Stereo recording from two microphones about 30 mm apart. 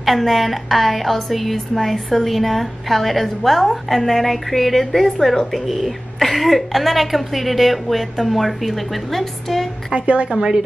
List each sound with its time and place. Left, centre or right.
0.0 s a woman's voice: centre
9.9 s a woman's voice: right